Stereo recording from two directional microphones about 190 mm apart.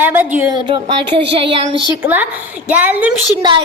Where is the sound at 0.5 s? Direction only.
25° right (ahead or behind).